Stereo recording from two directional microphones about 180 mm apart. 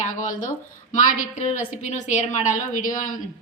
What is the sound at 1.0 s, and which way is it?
A woman's voice, 45° left (ahead or behind).